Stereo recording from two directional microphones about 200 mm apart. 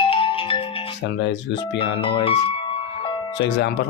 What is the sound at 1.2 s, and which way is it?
Speech, 60° left (ahead or behind).